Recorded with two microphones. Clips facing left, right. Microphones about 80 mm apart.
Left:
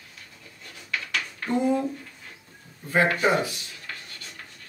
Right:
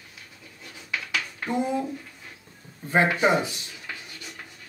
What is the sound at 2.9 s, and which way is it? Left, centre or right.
Speech, centre.